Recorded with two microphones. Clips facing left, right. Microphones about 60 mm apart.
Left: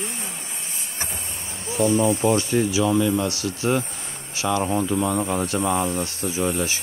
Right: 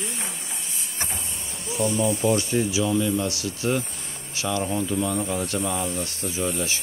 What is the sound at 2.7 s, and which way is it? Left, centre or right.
Speech, left.